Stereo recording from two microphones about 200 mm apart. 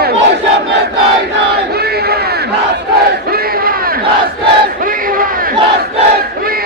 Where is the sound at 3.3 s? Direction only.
50° right (ahead or behind).